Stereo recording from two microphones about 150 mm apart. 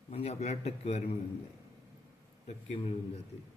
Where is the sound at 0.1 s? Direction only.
45° left (ahead or behind).